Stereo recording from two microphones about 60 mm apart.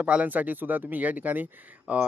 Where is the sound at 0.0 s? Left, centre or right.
Right.